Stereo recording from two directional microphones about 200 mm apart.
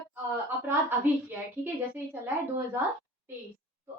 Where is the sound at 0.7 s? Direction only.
10° right (ahead or behind).